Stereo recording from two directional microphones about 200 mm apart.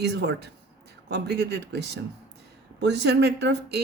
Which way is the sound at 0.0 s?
55° right (ahead or behind).